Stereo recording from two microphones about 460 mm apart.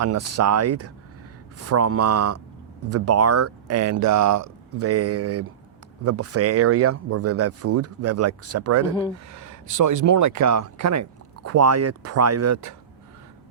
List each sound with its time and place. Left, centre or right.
0.0 s speech: right